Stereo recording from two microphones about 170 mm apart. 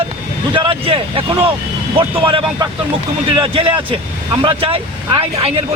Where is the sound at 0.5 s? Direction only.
30° right (ahead or behind).